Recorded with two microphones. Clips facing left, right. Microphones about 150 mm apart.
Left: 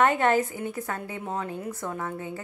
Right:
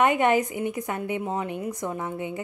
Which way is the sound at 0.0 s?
15° right (ahead or behind).